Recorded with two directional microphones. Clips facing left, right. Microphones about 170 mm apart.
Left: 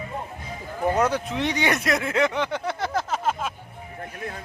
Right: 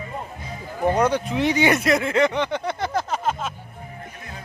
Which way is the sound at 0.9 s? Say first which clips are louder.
Right 2 dB; centre (ahead or behind).